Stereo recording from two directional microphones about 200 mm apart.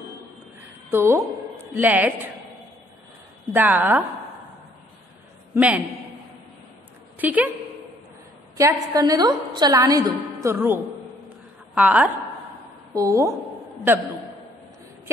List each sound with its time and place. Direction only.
0.8 s a woman's voice: 15° right (ahead or behind)
3.5 s a woman's voice: 10° right (ahead or behind)
5.5 s a man's voice: 5° right (ahead or behind)
7.2 s a woman's voice: 10° right (ahead or behind)
8.5 s a woman's voice: 15° right (ahead or behind)